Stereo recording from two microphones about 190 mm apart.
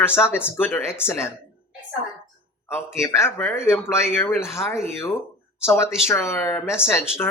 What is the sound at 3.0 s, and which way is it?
Speech, 15° left (ahead or behind).